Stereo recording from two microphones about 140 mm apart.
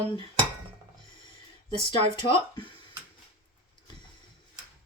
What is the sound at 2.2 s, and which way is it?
Speech, 35° left (ahead or behind).